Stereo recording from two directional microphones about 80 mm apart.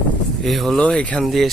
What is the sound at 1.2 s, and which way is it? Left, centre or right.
Speech, centre.